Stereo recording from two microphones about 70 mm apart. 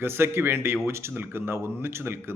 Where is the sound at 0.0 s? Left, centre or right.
Right.